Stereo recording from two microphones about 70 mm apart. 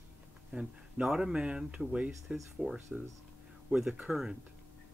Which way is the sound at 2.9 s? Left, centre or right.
Centre.